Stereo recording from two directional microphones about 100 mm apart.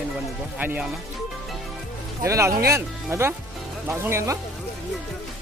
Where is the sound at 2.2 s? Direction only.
30° right (ahead or behind).